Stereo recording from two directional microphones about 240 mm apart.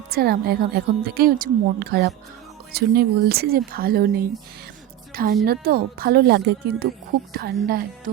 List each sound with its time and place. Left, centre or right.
0.1 s a woman's voice: right